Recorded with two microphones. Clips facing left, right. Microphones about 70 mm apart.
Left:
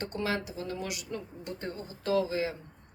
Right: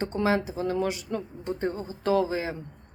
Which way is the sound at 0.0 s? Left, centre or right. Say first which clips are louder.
Right 7 dB; right.